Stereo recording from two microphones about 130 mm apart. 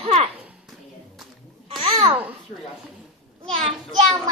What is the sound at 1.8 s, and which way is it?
Babbling, 40° right (ahead or behind).